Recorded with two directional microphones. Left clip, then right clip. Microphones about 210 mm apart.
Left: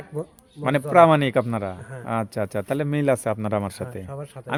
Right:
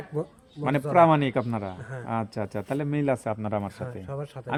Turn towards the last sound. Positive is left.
turn(degrees=0)  # may be behind; listen again after turning